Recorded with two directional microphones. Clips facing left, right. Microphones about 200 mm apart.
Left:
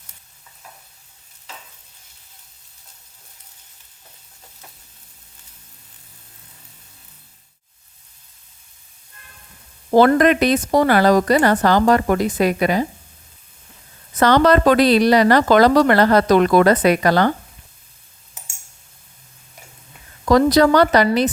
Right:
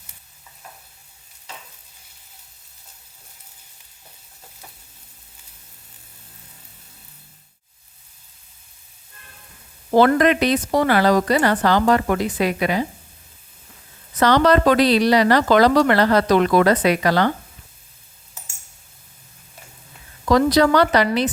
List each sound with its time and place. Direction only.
9.9 s a woman's voice: 45° left (ahead or behind)
14.2 s a woman's voice: 50° left (ahead or behind)
20.2 s a woman's voice: 45° left (ahead or behind)